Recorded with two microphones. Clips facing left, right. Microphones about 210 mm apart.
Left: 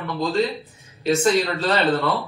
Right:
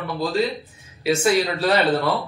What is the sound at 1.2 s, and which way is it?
Speech, 15° right (ahead or behind).